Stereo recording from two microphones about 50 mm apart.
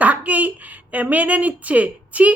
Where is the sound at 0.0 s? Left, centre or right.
Right.